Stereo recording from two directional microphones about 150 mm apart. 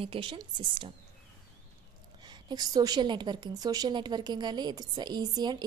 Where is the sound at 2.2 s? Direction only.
30° right (ahead or behind).